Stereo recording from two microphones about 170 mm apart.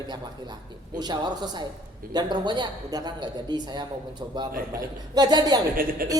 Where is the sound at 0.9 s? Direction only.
25° right (ahead or behind).